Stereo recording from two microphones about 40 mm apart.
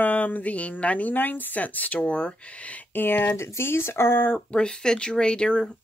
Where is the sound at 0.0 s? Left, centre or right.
Left.